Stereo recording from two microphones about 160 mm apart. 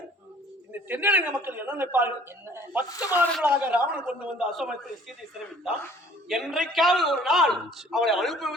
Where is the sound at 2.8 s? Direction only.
20° left (ahead or behind).